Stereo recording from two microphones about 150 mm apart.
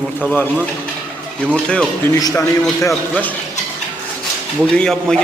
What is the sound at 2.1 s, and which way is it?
Speech, 25° left (ahead or behind).